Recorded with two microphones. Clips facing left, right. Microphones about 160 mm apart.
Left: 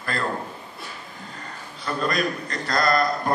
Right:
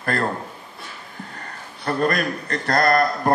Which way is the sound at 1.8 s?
55° right (ahead or behind).